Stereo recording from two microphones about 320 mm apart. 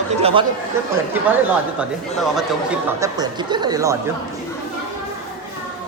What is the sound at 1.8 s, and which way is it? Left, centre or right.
Speech, centre.